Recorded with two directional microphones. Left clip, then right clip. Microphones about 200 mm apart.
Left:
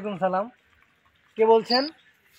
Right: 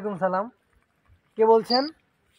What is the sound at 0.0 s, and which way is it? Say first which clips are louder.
Speech: even; 20° right (ahead or behind).